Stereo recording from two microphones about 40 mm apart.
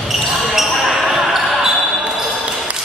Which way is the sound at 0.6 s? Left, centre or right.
Centre.